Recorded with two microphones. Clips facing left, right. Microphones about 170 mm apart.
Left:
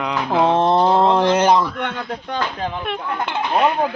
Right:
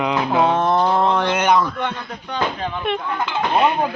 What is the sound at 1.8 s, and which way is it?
Speech, 55° left (ahead or behind).